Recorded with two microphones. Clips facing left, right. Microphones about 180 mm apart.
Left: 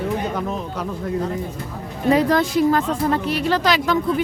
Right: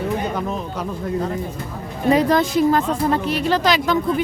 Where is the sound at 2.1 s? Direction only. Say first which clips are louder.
Right 1 dB; 20° right (ahead or behind).